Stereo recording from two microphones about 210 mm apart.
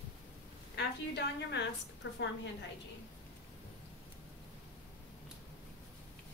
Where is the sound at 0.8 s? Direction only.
55° left (ahead or behind).